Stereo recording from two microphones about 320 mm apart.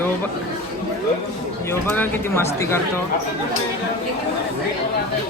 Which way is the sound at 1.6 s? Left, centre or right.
Centre.